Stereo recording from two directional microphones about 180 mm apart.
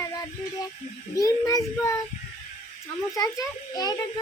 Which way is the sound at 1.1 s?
20° left (ahead or behind).